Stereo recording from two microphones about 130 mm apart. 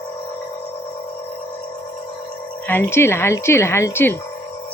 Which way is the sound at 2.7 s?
15° left (ahead or behind).